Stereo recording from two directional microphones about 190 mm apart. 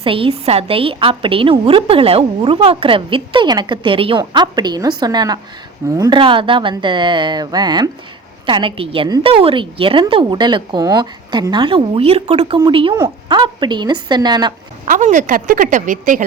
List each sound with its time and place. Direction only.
0.0 s a woman's voice: 30° right (ahead or behind)
14.8 s a woman's voice: 40° right (ahead or behind)